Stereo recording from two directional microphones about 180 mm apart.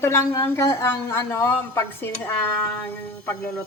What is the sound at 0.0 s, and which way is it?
A woman's voice, 15° left (ahead or behind).